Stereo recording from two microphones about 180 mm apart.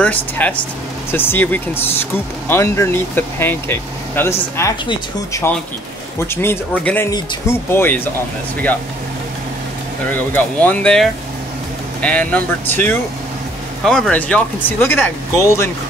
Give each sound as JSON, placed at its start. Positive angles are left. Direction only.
{"t": 0.0, "sound": "speech", "side_deg": 10}
{"t": 10.1, "sound": "speech", "side_deg": 10}